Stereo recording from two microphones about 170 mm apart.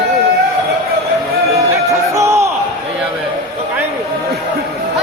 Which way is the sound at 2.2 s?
15° right (ahead or behind).